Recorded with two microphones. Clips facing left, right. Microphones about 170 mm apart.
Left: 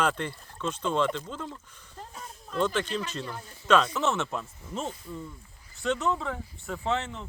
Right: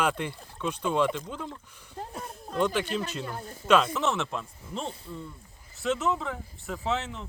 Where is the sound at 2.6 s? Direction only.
15° right (ahead or behind).